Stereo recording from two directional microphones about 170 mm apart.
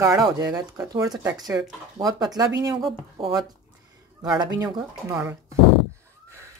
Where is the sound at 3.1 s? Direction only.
25° right (ahead or behind).